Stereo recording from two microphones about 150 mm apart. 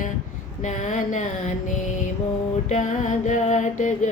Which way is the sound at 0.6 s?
55° left (ahead or behind).